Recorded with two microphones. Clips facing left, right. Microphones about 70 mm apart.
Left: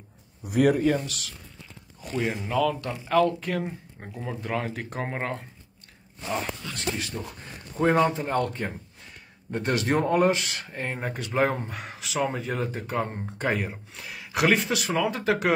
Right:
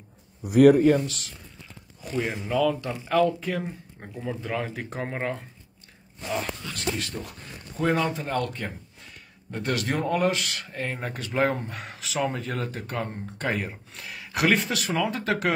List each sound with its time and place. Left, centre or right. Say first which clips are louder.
0.5 s speech: right 5 dB; right
1.0 s speech: right 2 dB; right
2.1 s speech: even; centre
6.7 s a man's voice: right 1 dB; left
7.8 s a man's voice: left 2 dB; left
8.2 s a man's voice: left 2 dB; left
13.0 s a man's voice: left 2 dB; left
13.6 s speech: left 1 dB; centre